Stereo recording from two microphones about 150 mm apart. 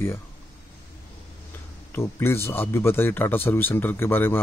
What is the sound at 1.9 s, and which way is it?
Speech, 15° left (ahead or behind).